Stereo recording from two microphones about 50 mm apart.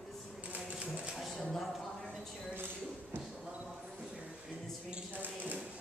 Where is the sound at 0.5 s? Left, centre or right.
Right.